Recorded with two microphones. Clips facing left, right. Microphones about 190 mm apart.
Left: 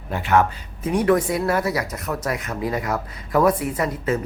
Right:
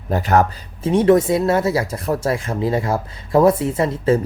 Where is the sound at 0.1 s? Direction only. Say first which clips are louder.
Right 3 dB; 40° right (ahead or behind).